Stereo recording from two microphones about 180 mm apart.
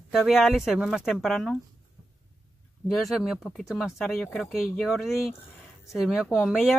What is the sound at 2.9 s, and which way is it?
Speech, centre (ahead or behind).